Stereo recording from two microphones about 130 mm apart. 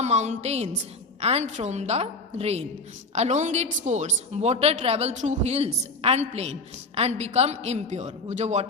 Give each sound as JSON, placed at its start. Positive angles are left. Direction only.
{"t": 0.0, "sound": "a woman's voice", "side_deg": -60}
{"t": 3.2, "sound": "a woman's voice", "side_deg": -65}